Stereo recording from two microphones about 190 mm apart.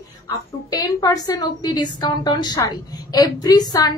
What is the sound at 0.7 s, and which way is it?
A woman's voice, 20° left (ahead or behind).